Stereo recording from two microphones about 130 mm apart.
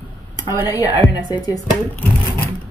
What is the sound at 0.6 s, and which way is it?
Speech, 30° left (ahead or behind).